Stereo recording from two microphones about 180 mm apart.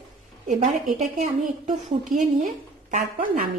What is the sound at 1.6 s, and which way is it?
A woman's voice, 40° right (ahead or behind).